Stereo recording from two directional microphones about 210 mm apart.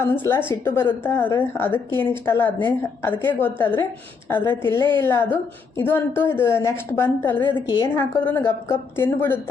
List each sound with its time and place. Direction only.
0.0 s a woman's voice: 10° left (ahead or behind)
4.8 s a woman's voice: 20° right (ahead or behind)
5.2 s a woman's voice: 10° left (ahead or behind)